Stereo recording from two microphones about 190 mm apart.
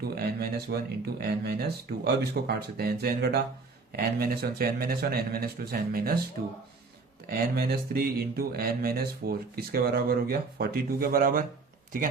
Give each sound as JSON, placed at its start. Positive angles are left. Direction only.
{"t": 0.2, "sound": "speech", "side_deg": -55}
{"t": 7.3, "sound": "speech", "side_deg": -55}